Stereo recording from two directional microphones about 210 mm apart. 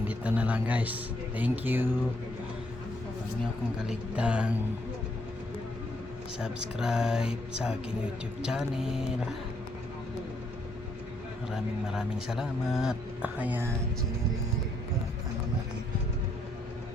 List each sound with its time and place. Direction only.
0.1 s speech: 5° right (ahead or behind)
3.8 s a man's voice: 5° right (ahead or behind)
6.7 s a man's voice: 5° right (ahead or behind)
11.5 s a man's voice: 5° right (ahead or behind)